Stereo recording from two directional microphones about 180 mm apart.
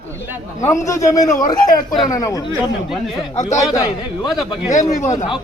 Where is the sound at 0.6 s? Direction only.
15° left (ahead or behind).